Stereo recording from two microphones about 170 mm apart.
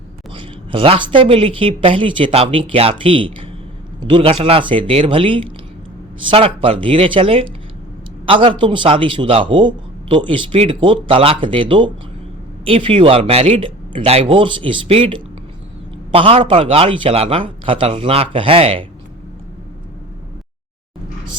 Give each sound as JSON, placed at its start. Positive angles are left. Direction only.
{"t": 0.3, "sound": "a man's voice", "side_deg": -30}